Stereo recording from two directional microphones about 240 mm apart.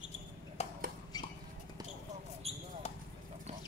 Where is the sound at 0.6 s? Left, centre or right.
Left.